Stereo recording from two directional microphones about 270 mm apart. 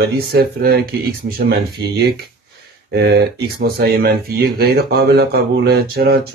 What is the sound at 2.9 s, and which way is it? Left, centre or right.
Speech, right.